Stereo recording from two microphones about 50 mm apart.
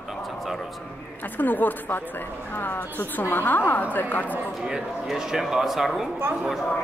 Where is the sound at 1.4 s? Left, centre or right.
Left.